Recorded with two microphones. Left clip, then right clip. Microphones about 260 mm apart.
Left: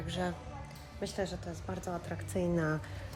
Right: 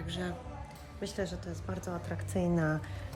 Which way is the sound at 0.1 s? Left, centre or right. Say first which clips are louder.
Left 3 dB; centre.